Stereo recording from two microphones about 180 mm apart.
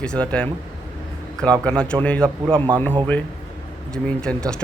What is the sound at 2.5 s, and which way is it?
Speech, 25° right (ahead or behind).